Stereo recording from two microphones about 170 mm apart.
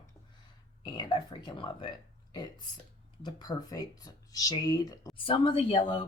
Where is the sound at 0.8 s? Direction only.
25° left (ahead or behind).